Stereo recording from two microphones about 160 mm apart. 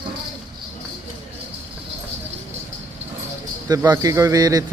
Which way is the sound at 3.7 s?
25° right (ahead or behind).